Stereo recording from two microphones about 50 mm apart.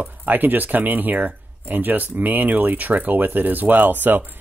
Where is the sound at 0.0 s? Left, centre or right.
Right.